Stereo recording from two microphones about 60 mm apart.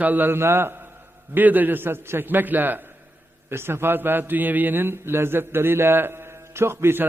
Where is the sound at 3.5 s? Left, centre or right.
Right.